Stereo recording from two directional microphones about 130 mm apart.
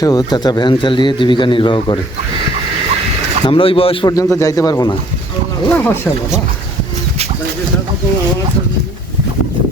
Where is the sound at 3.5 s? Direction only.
45° left (ahead or behind).